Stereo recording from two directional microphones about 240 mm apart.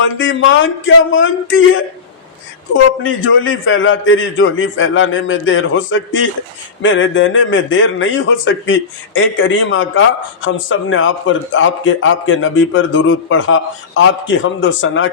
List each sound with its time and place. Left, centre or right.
0.0 s a man's voice: left